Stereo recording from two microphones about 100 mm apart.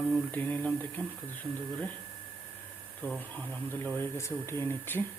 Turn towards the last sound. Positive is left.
turn(degrees=20)  # may be behind; listen again after turning